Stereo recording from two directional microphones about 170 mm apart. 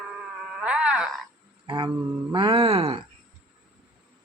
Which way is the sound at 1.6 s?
25° right (ahead or behind).